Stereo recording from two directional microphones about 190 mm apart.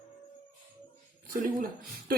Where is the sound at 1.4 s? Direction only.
50° right (ahead or behind).